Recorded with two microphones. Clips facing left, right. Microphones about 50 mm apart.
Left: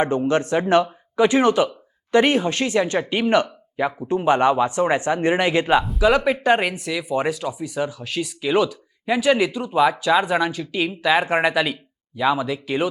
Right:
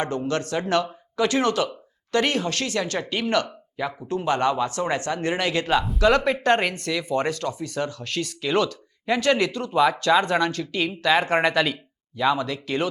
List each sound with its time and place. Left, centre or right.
0.0 s speech: left
5.8 s speech: centre